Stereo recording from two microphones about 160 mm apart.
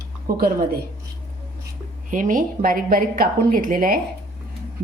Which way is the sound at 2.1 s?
55° right (ahead or behind).